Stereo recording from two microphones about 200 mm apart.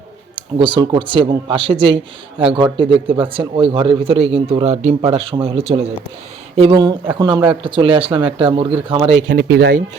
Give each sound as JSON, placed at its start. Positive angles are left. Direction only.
{"t": 0.3, "sound": "speech", "side_deg": -25}